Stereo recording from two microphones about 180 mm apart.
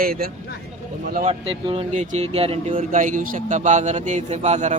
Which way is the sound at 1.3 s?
30° right (ahead or behind).